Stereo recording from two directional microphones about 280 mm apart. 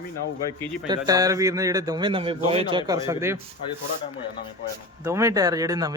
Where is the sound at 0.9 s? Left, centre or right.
Centre.